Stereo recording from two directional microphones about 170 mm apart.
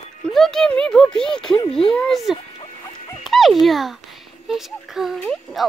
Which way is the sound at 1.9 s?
5° left (ahead or behind).